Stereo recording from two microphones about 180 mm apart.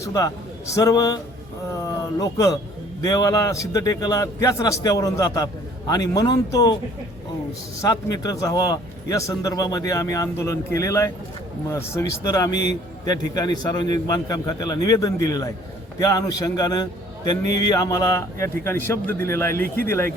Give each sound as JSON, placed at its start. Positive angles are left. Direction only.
{"t": 0.0, "sound": "a man's voice", "side_deg": 20}
{"t": 7.8, "sound": "a man's voice", "side_deg": 20}